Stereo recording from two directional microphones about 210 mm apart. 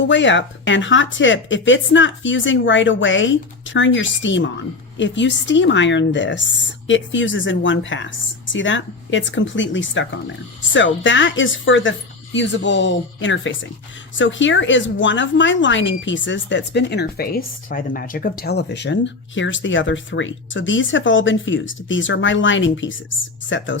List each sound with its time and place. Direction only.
0.0 s speech: 60° left (ahead or behind)